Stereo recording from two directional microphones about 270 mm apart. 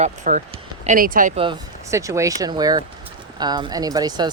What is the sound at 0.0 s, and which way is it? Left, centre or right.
Speech, right.